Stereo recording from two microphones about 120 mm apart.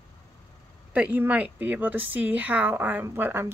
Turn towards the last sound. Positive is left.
turn(degrees=-20)  # may be behind; listen again after turning